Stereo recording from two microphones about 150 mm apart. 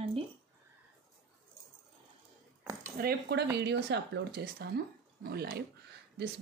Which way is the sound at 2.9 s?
90° right.